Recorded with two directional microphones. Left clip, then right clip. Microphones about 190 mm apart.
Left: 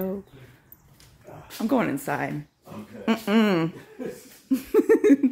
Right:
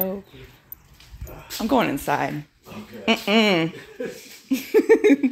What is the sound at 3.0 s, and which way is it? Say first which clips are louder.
Speech: right 4 dB; 10° left (ahead or behind).